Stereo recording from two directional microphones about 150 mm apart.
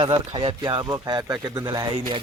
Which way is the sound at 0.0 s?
35° right (ahead or behind).